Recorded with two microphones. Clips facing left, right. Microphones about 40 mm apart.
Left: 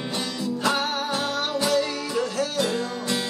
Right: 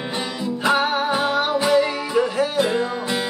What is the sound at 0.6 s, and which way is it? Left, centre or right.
Music, centre.